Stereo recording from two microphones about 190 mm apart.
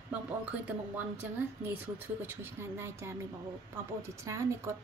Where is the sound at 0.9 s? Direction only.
10° right (ahead or behind).